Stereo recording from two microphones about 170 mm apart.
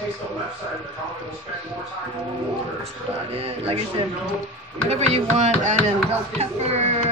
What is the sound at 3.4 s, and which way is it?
Chopping, 35° right (ahead or behind).